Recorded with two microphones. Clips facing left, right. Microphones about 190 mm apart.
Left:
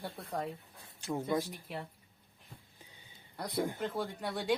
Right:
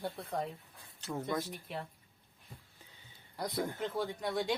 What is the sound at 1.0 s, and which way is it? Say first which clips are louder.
Speech: left 2 dB; 10° left (ahead or behind).